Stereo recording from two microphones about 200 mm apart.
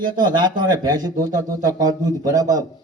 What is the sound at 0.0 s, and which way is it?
A man's voice, 20° right (ahead or behind).